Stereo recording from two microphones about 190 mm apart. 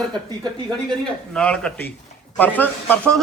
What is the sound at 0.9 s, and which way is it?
A man's voice, 5° left (ahead or behind).